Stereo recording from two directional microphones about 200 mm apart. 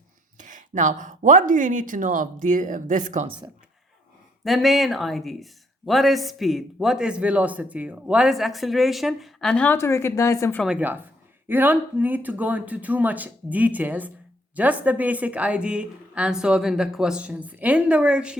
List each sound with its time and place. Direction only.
0.3 s speech: 40° right (ahead or behind)
4.4 s speech: centre (ahead or behind)
10.6 s speech: 5° right (ahead or behind)